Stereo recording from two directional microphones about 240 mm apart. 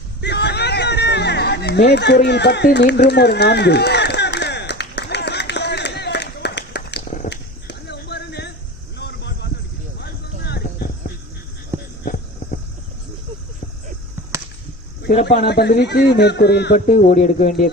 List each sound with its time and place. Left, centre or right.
0.2 s music: left
7.2 s clip-clop: left
9.9 s a sound: left
12.0 s hum: left
15.2 s a man's voice: left